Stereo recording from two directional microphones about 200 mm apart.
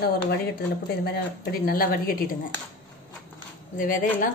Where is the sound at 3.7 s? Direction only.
40° left (ahead or behind).